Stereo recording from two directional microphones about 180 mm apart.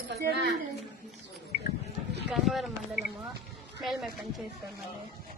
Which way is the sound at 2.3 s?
Centre (ahead or behind).